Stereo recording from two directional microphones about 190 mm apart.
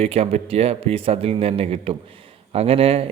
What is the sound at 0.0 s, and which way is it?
Speech, 30° right (ahead or behind).